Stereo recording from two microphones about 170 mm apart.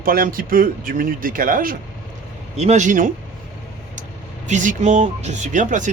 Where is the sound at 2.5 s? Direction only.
40° right (ahead or behind).